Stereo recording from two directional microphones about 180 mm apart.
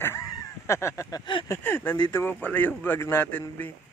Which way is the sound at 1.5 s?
10° left (ahead or behind).